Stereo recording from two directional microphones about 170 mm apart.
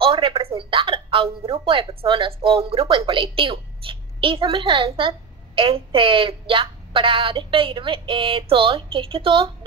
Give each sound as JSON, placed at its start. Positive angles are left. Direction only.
{"t": 0.0, "sound": "a woman's voice", "side_deg": -30}